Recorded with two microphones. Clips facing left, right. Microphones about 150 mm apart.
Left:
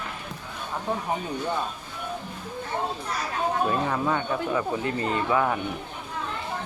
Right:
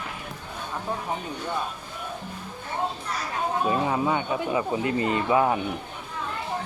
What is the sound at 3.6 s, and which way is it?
Speech, 10° right (ahead or behind).